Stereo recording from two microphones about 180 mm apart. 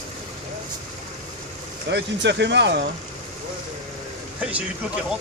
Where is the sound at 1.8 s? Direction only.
75° right (ahead or behind).